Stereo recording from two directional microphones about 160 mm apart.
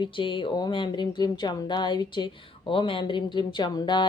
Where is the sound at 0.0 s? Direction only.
30° left (ahead or behind).